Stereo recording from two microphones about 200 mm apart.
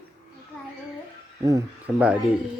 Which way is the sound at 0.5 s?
Centre (ahead or behind).